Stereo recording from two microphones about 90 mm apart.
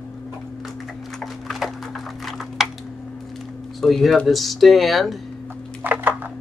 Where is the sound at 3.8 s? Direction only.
Centre (ahead or behind).